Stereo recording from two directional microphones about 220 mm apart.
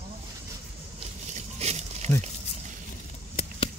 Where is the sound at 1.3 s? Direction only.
30° right (ahead or behind).